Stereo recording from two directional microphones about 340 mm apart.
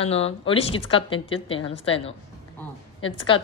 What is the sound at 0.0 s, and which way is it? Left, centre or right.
A woman's voice, centre.